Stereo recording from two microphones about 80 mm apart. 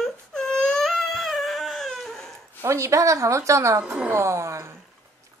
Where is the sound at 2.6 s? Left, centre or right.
Right.